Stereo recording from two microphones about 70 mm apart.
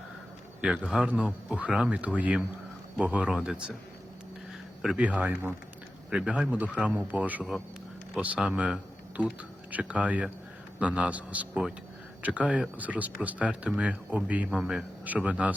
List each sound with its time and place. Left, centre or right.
0.6 s a man's voice: centre
4.9 s a man's voice: right
14.6 s a man's voice: centre
15.0 s speech: right